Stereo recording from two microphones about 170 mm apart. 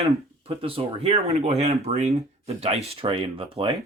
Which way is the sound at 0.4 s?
35° right (ahead or behind).